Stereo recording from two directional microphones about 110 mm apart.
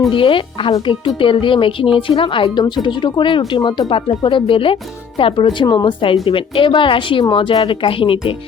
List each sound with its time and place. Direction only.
0.1 s speech: 50° left (ahead or behind)